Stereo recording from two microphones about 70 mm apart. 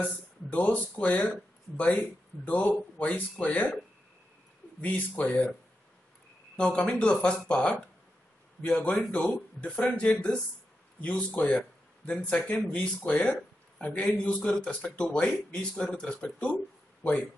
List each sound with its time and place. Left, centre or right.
0.5 s speech: left
4.8 s speech: left
6.5 s a man's voice: centre
11.3 s a man's voice: centre